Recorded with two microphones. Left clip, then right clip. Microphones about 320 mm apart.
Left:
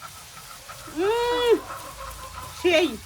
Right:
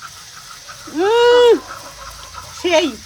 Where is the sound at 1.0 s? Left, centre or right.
Right.